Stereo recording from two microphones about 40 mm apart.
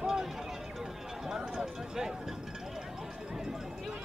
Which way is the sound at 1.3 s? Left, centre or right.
Centre.